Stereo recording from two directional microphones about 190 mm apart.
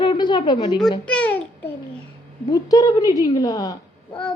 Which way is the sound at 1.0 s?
5° left (ahead or behind).